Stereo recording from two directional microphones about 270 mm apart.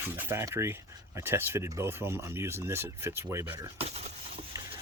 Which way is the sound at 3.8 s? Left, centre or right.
Right.